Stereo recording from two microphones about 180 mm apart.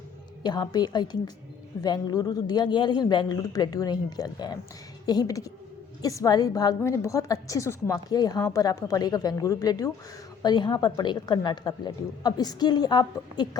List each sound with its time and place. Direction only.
0.4 s a woman's voice: 25° left (ahead or behind)